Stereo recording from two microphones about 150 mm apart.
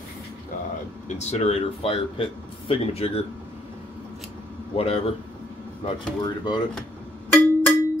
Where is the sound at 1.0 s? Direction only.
45° left (ahead or behind).